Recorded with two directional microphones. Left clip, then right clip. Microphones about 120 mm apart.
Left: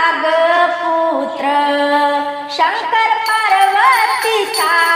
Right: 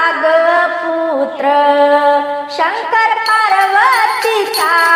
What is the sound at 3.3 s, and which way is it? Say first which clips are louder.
Music: right 1 dB; 30° right (ahead or behind).